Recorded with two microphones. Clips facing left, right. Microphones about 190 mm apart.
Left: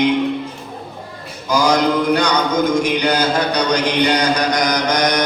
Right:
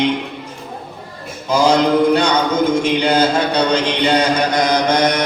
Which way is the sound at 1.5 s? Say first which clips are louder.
Right 2 dB; 25° right (ahead or behind).